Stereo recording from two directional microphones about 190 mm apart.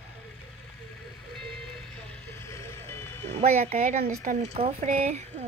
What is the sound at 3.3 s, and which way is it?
Speech, 35° right (ahead or behind).